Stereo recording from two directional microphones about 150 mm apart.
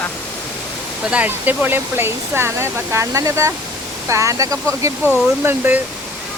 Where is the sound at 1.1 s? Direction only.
10° right (ahead or behind).